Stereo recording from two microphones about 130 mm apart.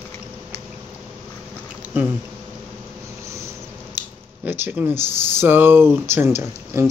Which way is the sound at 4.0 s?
15° right (ahead or behind).